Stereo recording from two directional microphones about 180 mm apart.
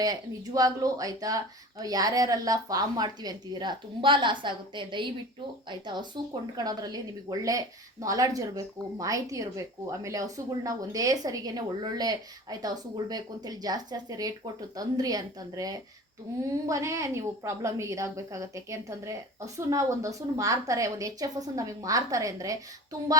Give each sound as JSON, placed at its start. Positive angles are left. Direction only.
{"t": 0.0, "sound": "a woman's voice", "side_deg": -20}